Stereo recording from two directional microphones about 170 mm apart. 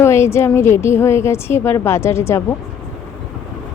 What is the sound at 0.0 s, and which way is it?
Speech, 15° left (ahead or behind).